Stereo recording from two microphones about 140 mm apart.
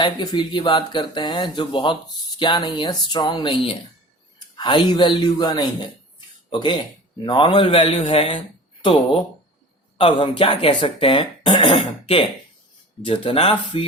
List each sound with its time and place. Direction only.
0.0 s speech: 30° left (ahead or behind)